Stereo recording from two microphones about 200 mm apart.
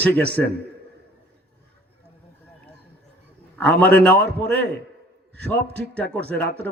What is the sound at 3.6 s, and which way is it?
Speech, 10° left (ahead or behind).